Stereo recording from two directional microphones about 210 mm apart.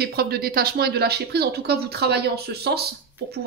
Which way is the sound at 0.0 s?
50° right (ahead or behind).